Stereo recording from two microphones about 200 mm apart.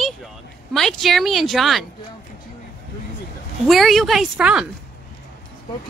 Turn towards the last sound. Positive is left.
turn(degrees=-5)  # may be behind; listen again after turning